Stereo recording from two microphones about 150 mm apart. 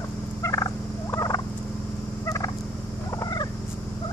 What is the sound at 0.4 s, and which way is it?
Fowl, 25° left (ahead or behind).